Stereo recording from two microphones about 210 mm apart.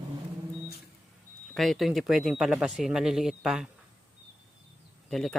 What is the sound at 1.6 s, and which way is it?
Speech, centre (ahead or behind).